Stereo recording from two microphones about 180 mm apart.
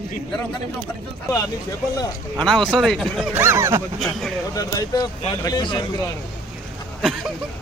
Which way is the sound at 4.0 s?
Centre (ahead or behind).